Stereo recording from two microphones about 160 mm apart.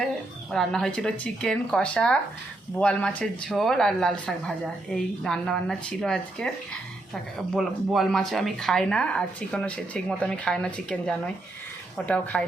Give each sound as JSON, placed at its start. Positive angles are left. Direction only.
{"t": 0.5, "sound": "speech", "side_deg": 0}